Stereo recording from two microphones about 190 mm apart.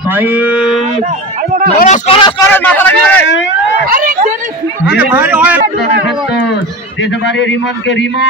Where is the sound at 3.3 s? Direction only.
65° left (ahead or behind).